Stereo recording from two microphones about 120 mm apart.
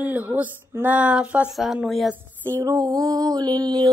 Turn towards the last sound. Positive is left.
turn(degrees=-30)  # may be behind; listen again after turning